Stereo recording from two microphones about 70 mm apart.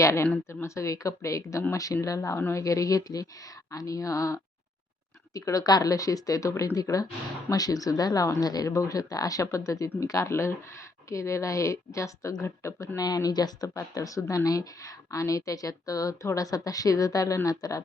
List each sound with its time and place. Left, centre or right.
0.0 s a woman's voice: left
8.7 s speech: left
13.0 s a woman's voice: left
13.7 s a woman's voice: left